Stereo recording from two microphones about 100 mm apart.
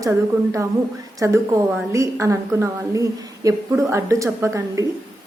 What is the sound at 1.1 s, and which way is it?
A woman's voice, 30° right (ahead or behind).